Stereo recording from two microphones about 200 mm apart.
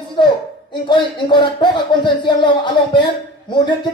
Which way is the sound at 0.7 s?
25° left (ahead or behind).